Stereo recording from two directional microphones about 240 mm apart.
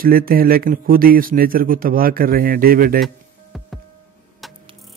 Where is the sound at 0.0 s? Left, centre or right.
Right.